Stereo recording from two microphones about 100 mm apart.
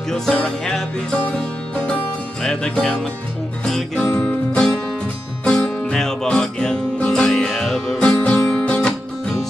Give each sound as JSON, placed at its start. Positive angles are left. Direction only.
{"t": 0.1, "sound": "music", "side_deg": 5}
{"t": 2.4, "sound": "music", "side_deg": 10}
{"t": 4.0, "sound": "music", "side_deg": 25}
{"t": 4.5, "sound": "music", "side_deg": 10}
{"t": 8.0, "sound": "music", "side_deg": 15}